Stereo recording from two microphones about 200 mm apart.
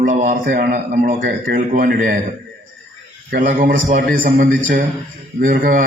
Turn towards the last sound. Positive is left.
turn(degrees=-45)  # may be behind; listen again after turning